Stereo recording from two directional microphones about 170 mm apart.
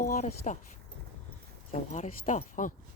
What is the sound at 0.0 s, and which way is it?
Speech, 50° left (ahead or behind).